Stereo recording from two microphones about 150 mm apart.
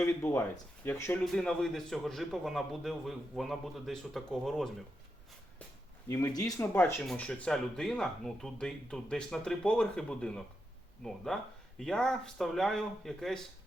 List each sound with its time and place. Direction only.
0.0 s speech: 15° left (ahead or behind)
1.2 s a man's voice: 5° left (ahead or behind)
6.1 s speech: 25° left (ahead or behind)
7.0 s a man's voice: 5° left (ahead or behind)